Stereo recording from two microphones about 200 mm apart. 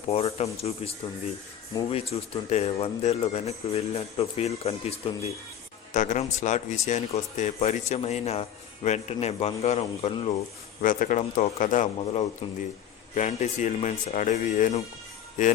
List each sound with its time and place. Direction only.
0.1 s speech: 30° left (ahead or behind)
1.9 s speech: 30° left (ahead or behind)
10.8 s speech: 40° left (ahead or behind)